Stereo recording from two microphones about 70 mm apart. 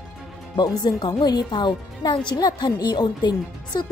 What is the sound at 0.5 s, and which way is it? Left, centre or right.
Speech, left.